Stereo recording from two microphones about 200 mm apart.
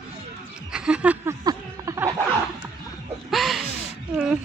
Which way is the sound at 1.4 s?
20° right (ahead or behind).